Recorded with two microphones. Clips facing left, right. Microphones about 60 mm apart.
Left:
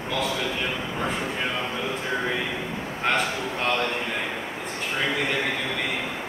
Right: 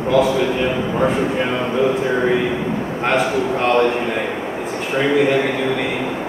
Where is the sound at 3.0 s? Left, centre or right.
Centre.